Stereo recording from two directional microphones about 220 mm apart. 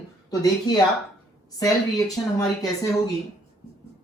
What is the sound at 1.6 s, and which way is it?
Speech, 15° left (ahead or behind).